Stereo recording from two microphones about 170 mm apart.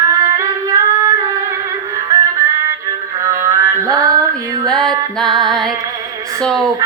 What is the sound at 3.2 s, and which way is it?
Music, 15° right (ahead or behind).